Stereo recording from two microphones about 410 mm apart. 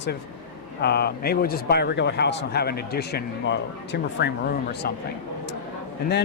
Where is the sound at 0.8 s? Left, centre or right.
Left.